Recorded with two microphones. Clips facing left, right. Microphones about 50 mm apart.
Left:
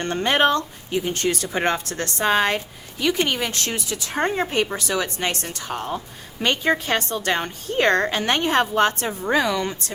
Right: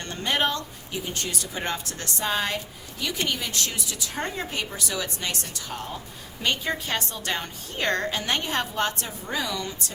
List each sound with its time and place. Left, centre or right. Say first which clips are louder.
0.0 s a woman's voice: left 7 dB; left
9.0 s a woman's voice: left 9 dB; left